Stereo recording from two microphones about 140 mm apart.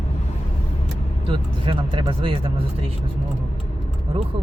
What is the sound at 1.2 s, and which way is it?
Speech, 35° right (ahead or behind).